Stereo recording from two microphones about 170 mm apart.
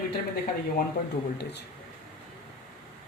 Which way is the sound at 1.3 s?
80° left.